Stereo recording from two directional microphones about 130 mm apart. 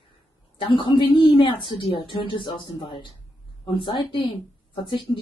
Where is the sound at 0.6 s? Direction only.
40° left (ahead or behind).